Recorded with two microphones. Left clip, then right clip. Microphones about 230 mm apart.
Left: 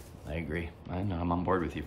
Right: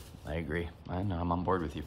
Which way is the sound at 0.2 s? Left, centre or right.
Centre.